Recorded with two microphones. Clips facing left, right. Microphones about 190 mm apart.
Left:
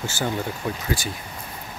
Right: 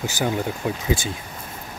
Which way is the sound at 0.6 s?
15° right (ahead or behind).